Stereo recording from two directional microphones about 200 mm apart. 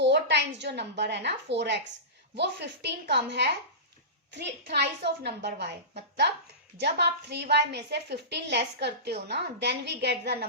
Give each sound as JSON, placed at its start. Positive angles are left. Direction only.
{"t": 0.0, "sound": "a woman's voice", "side_deg": -60}
{"t": 6.7, "sound": "a woman's voice", "side_deg": -55}